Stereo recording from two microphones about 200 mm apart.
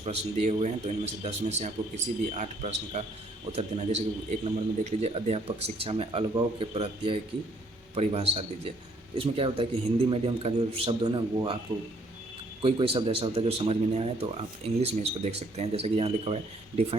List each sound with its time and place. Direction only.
0.0 s a man's voice: 30° right (ahead or behind)
12.6 s a man's voice: 25° right (ahead or behind)